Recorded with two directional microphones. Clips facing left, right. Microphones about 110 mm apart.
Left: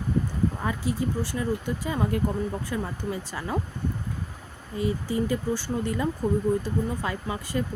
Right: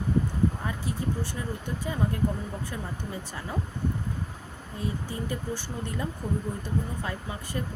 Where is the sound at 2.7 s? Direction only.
90° left.